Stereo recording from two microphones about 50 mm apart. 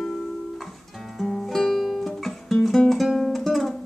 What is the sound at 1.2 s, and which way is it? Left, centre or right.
Music, centre.